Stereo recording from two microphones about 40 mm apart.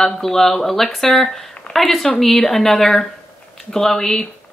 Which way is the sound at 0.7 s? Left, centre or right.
Centre.